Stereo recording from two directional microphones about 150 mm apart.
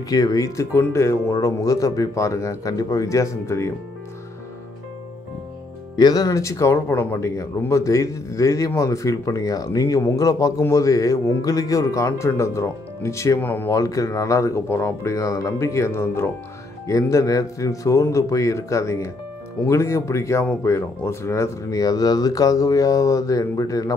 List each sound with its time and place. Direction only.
0.1 s speech: 20° left (ahead or behind)
5.9 s speech: 25° left (ahead or behind)